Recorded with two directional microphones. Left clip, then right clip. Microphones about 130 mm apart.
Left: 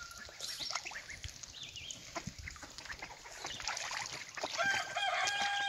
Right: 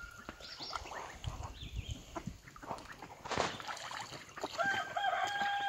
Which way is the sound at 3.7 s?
5° left (ahead or behind).